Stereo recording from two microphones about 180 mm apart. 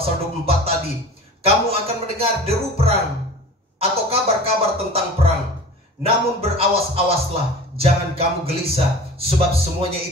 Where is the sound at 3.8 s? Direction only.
35° right (ahead or behind).